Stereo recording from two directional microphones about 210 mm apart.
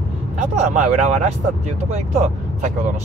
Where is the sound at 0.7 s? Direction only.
35° right (ahead or behind).